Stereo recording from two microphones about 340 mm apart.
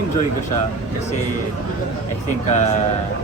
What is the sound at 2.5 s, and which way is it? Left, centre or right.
Speech, centre.